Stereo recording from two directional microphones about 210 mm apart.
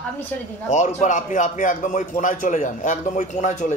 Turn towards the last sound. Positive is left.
turn(degrees=35)  # may be behind; listen again after turning